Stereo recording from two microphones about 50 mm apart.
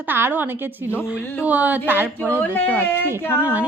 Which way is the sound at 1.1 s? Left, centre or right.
Right.